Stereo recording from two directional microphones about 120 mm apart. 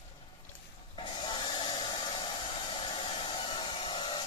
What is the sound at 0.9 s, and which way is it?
Hair dryer, 45° left (ahead or behind).